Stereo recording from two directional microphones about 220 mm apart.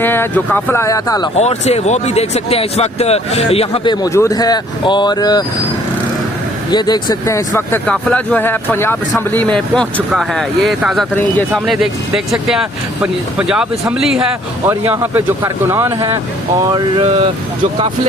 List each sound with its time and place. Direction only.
0.0 s a man's voice: 10° left (ahead or behind)
1.4 s speech: 30° left (ahead or behind)
6.7 s a man's voice: 20° left (ahead or behind); by 16.2 s 10° right (ahead or behind)
16.7 s a sound: 25° right (ahead or behind)